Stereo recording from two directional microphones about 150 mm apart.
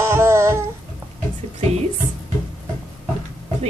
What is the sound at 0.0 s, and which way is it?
Child singing, 15° right (ahead or behind).